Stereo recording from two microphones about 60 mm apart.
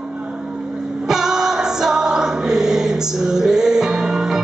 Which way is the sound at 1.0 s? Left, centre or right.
Centre.